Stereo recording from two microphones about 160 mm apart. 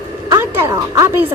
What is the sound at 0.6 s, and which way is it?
Speech, 15° right (ahead or behind).